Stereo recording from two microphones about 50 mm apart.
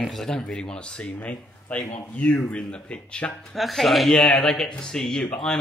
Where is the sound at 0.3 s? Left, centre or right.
Centre.